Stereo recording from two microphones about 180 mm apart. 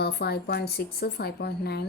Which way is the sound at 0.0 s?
65° left (ahead or behind).